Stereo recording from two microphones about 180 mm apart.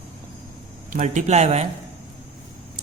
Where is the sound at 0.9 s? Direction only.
40° right (ahead or behind).